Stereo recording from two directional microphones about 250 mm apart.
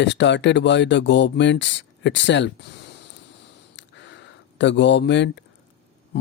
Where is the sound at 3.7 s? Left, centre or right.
Left.